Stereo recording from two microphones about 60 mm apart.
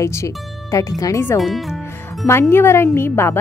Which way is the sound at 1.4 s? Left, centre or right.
Centre.